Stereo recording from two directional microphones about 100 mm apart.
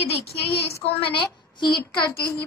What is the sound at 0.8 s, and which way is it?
A woman's voice, 60° left (ahead or behind).